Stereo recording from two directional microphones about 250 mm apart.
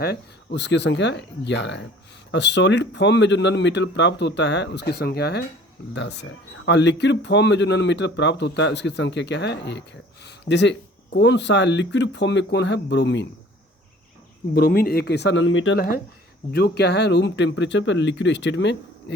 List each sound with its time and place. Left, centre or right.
0.0 s speech: left
14.5 s speech: left
16.5 s speech: left